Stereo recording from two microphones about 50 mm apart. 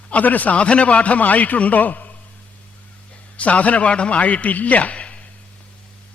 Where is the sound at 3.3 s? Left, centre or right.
Left.